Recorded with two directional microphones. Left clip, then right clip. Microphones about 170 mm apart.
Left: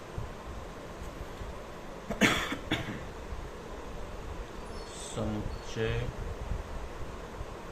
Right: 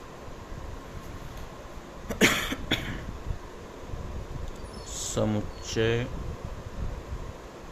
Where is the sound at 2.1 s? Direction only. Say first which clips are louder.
Right 4 dB; 80° right.